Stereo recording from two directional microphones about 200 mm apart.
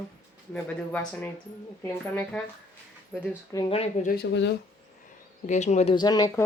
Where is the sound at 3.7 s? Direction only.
35° left (ahead or behind).